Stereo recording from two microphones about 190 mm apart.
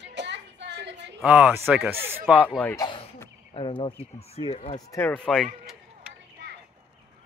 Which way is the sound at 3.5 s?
30° left (ahead or behind).